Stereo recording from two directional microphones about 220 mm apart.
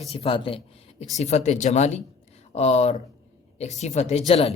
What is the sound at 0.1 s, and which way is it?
A man's voice, 25° left (ahead or behind).